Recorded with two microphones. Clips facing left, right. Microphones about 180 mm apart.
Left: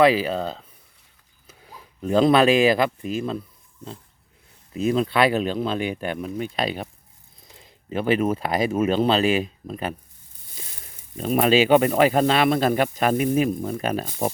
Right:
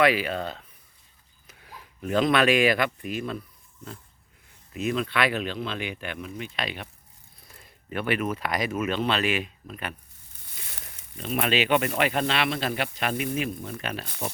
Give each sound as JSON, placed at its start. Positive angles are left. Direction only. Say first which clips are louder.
{"t": 0.1, "sound": "speech", "louder": "left 4 dB", "side_deg": 35}
{"t": 4.7, "sound": "speech", "louder": "left 6 dB", "side_deg": 35}
{"t": 7.4, "sound": "speech", "louder": "left 4 dB", "side_deg": 20}
{"t": 11.2, "sound": "speech", "louder": "left 8 dB", "side_deg": 40}